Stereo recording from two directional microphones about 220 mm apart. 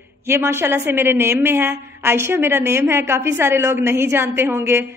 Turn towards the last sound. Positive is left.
turn(degrees=-10)  # may be behind; listen again after turning